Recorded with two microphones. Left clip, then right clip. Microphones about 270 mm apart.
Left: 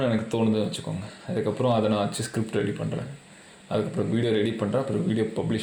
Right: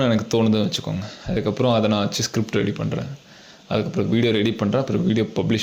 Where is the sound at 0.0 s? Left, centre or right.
Right.